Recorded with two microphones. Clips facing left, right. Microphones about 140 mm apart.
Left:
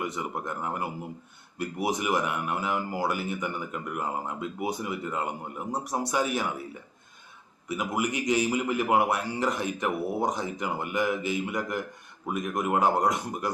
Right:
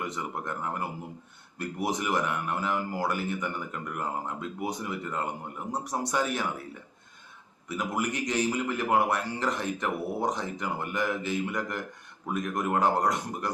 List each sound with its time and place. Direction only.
0.0 s speech: 10° left (ahead or behind)
7.7 s speech: 10° left (ahead or behind)